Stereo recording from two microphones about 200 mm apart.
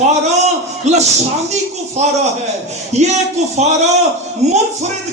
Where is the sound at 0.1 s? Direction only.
35° right (ahead or behind).